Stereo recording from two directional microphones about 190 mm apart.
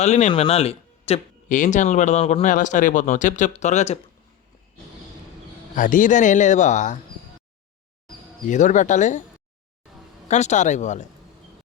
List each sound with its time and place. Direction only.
0.0 s speech: 35° left (ahead or behind)
5.7 s speech: 45° left (ahead or behind)
8.4 s speech: 40° left (ahead or behind)
10.2 s speech: 35° left (ahead or behind)